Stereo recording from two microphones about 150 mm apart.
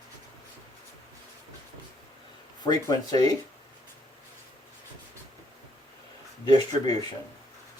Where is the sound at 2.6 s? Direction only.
25° left (ahead or behind).